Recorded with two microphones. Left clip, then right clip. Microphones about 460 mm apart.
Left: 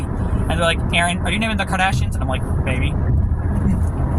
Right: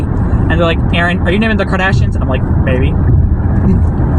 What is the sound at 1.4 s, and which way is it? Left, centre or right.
Speech, left.